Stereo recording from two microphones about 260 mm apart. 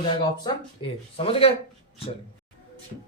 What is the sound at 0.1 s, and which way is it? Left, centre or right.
Speech, centre.